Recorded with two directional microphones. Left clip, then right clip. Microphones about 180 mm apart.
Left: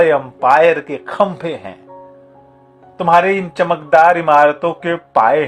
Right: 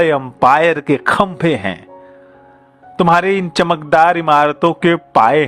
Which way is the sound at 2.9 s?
45° right (ahead or behind).